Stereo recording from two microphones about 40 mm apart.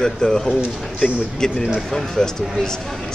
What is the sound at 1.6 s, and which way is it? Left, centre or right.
A man's voice, centre.